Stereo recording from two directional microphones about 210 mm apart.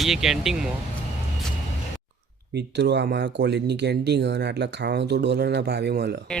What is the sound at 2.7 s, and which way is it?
Speech, 55° right (ahead or behind).